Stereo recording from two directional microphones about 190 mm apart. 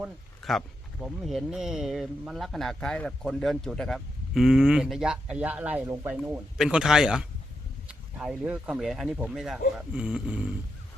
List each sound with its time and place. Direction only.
0.0 s speech: centre (ahead or behind)